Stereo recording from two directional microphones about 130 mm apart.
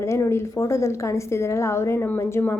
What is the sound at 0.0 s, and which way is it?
A woman's voice, 20° left (ahead or behind).